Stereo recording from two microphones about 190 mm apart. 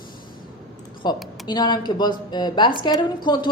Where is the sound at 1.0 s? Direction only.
25° left (ahead or behind).